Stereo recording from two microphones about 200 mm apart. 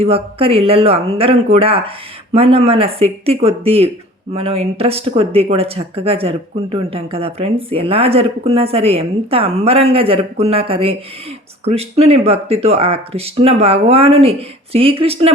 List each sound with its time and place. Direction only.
0.0 s speech: 30° right (ahead or behind)